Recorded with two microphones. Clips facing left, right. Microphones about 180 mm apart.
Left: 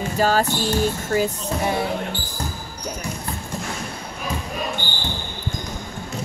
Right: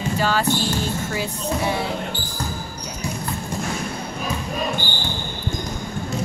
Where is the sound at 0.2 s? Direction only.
45° left (ahead or behind).